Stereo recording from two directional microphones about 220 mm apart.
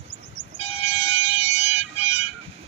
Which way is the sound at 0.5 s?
25° left (ahead or behind).